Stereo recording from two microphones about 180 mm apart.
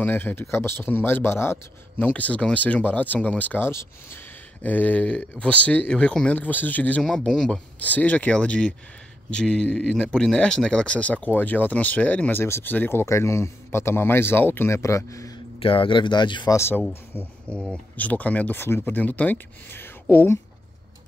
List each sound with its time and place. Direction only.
0.0 s speech: 10° left (ahead or behind)
15.6 s speech: 30° left (ahead or behind)
16.5 s speech: 15° left (ahead or behind)